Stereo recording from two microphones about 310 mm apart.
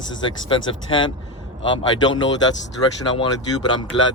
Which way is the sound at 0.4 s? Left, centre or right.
Centre.